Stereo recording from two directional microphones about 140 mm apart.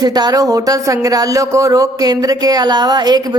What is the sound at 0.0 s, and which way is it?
Speech, 25° right (ahead or behind).